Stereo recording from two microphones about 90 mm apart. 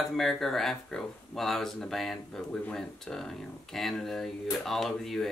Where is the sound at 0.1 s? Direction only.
5° left (ahead or behind).